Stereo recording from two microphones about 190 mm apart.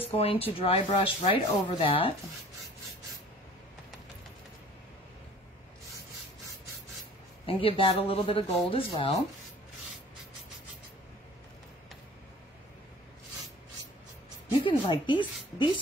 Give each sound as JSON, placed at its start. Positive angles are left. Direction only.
{"t": 0.0, "sound": "speech", "side_deg": 30}
{"t": 7.4, "sound": "speech", "side_deg": 30}
{"t": 14.6, "sound": "speech", "side_deg": 25}